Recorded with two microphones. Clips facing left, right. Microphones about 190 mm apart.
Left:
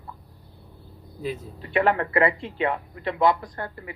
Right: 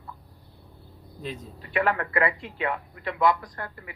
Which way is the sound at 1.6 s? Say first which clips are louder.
Left 3 dB; 25° left (ahead or behind).